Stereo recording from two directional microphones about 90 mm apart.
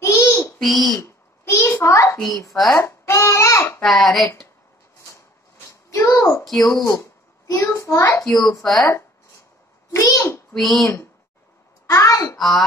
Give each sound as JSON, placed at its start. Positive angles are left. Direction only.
{"t": 0.0, "sound": "babbling", "side_deg": 35}
{"t": 0.6, "sound": "a child's voice", "side_deg": 0}
{"t": 0.9, "sound": "a sound", "side_deg": 35}
{"t": 2.5, "sound": "speech", "side_deg": 0}
{"t": 2.8, "sound": "babbling", "side_deg": 30}
{"t": 3.8, "sound": "speech", "side_deg": 0}
{"t": 5.7, "sound": "a sound", "side_deg": 35}
{"t": 6.6, "sound": "a child's voice", "side_deg": 40}
{"t": 9.9, "sound": "a sound", "side_deg": 40}
{"t": 10.5, "sound": "speech", "side_deg": 5}
{"t": 11.9, "sound": "a child's voice", "side_deg": 40}
{"t": 12.4, "sound": "speech", "side_deg": 0}